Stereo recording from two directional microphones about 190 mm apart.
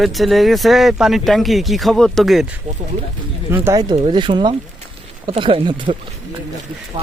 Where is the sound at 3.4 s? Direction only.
10° right (ahead or behind).